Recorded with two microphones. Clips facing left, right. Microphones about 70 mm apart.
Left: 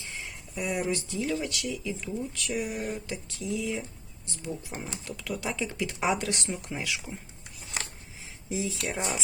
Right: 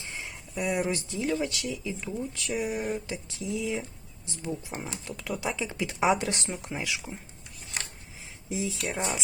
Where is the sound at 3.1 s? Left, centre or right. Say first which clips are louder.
Even; right.